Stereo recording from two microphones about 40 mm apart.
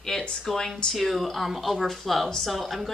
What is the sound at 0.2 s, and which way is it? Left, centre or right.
Speech, left.